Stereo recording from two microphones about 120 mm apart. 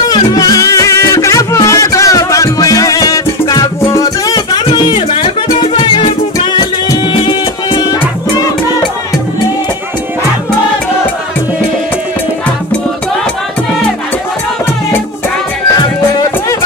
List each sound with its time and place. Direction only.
0.1 s music: 30° left (ahead or behind)
4.6 s music: 40° left (ahead or behind)
15.7 s music: 30° left (ahead or behind)